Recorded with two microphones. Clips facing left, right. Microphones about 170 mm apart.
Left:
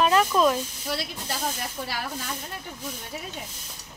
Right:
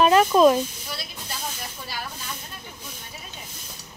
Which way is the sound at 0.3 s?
30° right (ahead or behind).